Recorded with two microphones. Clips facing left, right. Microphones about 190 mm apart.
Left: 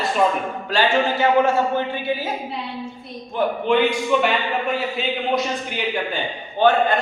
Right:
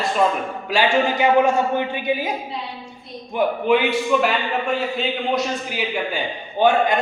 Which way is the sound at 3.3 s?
10° right (ahead or behind).